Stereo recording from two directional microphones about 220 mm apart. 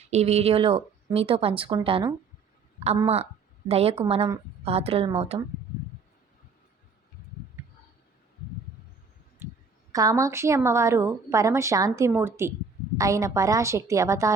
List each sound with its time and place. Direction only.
0.1 s a woman's voice: 30° right (ahead or behind)
9.4 s a sound: 10° right (ahead or behind)
9.9 s a woman's voice: 15° right (ahead or behind)